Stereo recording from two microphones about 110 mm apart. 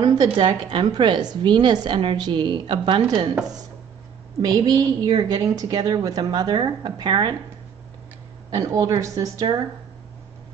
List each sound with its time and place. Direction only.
0.0 s a woman's voice: 35° right (ahead or behind)
0.5 s a woman's voice: 50° right (ahead or behind)
4.4 s a woman's voice: 35° right (ahead or behind)
8.5 s a woman's voice: 30° right (ahead or behind)